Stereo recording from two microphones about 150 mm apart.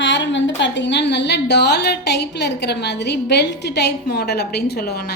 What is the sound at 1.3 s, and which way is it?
A woman's voice, 90° left.